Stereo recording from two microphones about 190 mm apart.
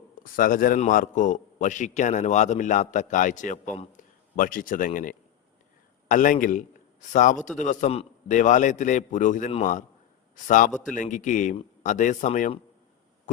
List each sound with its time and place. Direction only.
0.2 s a man's voice: 45° left (ahead or behind)